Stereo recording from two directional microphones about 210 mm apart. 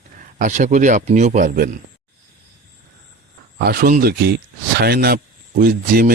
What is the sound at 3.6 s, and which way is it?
Speech, 50° right (ahead or behind).